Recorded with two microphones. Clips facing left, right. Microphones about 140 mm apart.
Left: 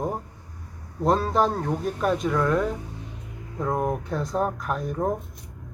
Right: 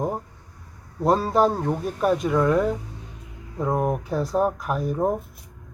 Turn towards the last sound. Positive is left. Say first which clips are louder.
# right 3 dB
turn(degrees=-10)  # may be behind; listen again after turning